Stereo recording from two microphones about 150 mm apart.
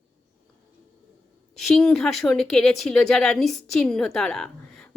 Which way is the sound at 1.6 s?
Centre (ahead or behind).